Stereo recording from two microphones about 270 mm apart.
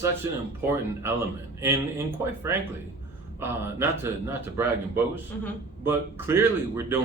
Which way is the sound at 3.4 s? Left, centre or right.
Centre.